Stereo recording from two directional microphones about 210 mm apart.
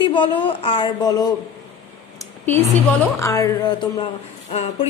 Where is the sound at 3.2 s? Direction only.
15° left (ahead or behind).